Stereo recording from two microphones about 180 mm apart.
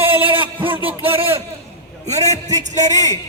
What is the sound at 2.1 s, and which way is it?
Speech, 40° right (ahead or behind).